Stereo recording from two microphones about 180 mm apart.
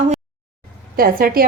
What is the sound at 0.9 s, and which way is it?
Speech, 55° right (ahead or behind).